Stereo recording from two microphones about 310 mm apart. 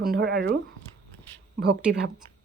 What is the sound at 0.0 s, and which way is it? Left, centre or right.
Speech, right.